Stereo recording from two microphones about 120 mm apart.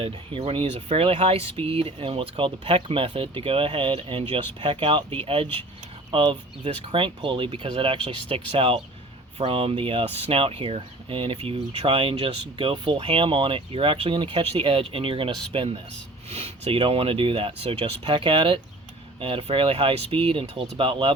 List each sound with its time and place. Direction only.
0.0 s speech: 50° right (ahead or behind)